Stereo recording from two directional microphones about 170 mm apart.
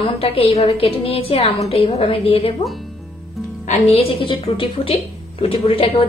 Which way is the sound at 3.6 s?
40° left (ahead or behind).